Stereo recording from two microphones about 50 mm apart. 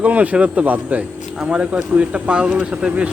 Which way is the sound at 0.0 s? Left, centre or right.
Right.